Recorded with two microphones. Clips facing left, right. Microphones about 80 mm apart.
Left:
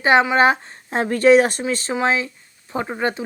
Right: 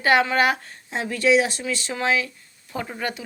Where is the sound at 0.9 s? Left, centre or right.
Left.